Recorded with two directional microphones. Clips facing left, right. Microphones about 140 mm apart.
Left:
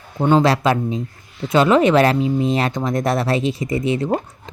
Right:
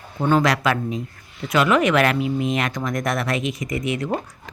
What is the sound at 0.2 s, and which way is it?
Speech, 25° left (ahead or behind).